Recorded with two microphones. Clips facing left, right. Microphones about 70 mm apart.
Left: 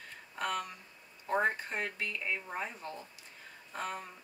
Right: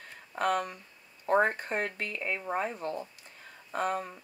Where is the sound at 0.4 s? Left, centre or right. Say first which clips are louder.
Right 7 dB; right.